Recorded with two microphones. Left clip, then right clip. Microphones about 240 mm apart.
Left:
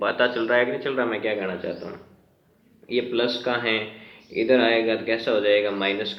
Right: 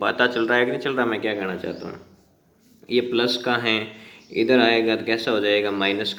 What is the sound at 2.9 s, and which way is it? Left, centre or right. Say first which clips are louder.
Speech: right 3 dB; right.